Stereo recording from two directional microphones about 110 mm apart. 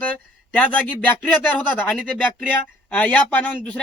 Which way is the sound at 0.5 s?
15° left (ahead or behind).